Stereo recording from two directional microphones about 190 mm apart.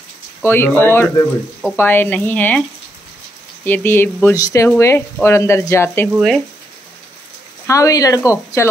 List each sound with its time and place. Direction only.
0.4 s speech: 10° left (ahead or behind)
3.6 s speech: 10° left (ahead or behind)
6.1 s speech: centre (ahead or behind)
7.6 s speech: 15° left (ahead or behind)